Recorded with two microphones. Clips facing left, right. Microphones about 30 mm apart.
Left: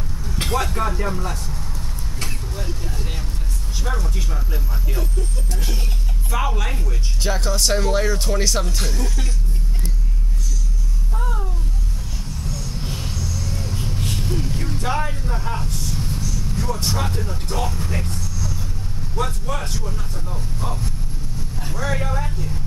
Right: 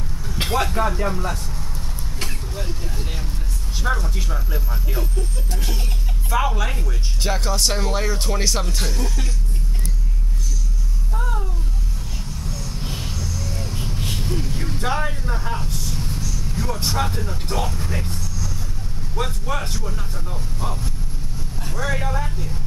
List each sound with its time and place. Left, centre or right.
0.4 s speech: centre
2.2 s vehicle: centre
3.9 s speech: centre
6.3 s speech: centre
11.1 s a sound: centre
12.8 s a sound: centre
13.1 s vehicle: centre
13.6 s vehicle: centre
14.9 s speech: centre
15.9 s vehicle: centre
16.7 s speech: centre
19.2 s speech: centre